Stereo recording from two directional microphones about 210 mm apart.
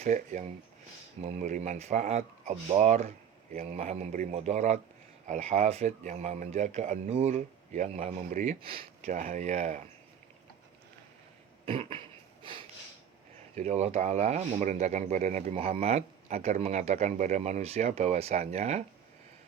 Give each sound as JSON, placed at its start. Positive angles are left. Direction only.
{"t": 0.0, "sound": "speech", "side_deg": -35}
{"t": 11.6, "sound": "a sound", "side_deg": -25}
{"t": 13.6, "sound": "speech", "side_deg": -30}